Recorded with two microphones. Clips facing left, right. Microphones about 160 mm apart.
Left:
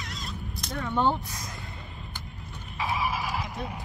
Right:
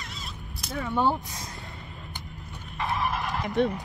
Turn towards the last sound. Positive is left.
turn(degrees=-90)